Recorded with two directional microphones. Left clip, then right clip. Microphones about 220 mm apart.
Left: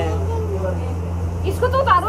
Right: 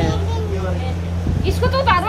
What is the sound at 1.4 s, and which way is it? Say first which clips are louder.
Speech: even; 60° right (ahead or behind).